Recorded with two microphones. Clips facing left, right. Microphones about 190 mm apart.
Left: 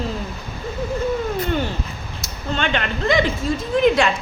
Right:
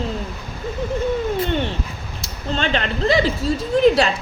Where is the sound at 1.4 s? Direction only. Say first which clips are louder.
Right 1 dB; 30° right (ahead or behind).